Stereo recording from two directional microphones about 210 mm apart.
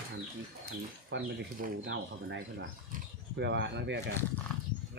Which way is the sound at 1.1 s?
60° right (ahead or behind).